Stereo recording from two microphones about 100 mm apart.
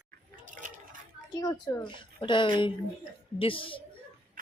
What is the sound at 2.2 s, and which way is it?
Speech, 55° left (ahead or behind).